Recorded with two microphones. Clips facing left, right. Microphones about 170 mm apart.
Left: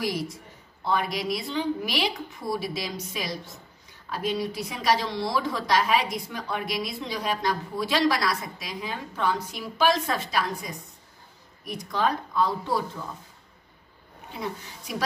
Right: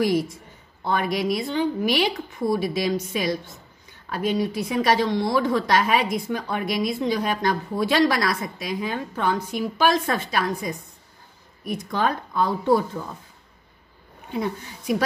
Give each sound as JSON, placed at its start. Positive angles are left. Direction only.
{"t": 0.8, "sound": "a woman's voice", "side_deg": -50}